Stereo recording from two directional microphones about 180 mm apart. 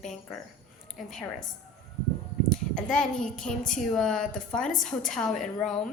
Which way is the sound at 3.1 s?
45° left (ahead or behind).